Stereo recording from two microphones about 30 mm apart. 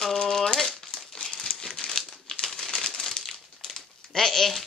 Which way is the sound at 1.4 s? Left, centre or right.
Left.